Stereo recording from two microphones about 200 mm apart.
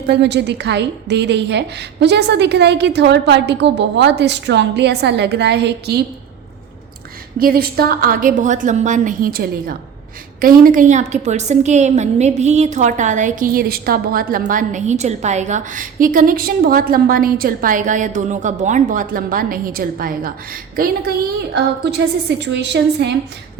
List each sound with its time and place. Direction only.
0.1 s a woman's voice: 60° right (ahead or behind)
7.3 s a woman's voice: 45° right (ahead or behind)
21.5 s a woman's voice: 55° right (ahead or behind)